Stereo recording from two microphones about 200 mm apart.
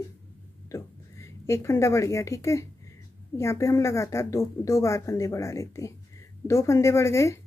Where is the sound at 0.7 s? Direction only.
15° left (ahead or behind).